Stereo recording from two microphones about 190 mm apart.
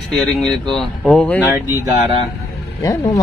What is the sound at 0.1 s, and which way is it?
Speech, centre (ahead or behind).